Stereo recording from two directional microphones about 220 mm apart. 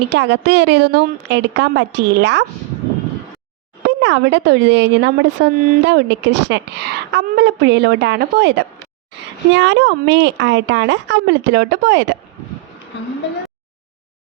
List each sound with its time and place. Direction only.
0.1 s speech: 50° right (ahead or behind)
3.8 s a woman's voice: 55° right (ahead or behind)